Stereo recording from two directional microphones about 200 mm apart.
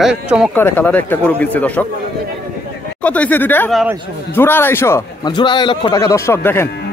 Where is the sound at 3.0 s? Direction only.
5° left (ahead or behind).